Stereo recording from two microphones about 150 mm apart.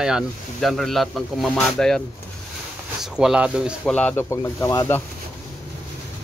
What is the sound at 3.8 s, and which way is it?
Speech, 10° left (ahead or behind).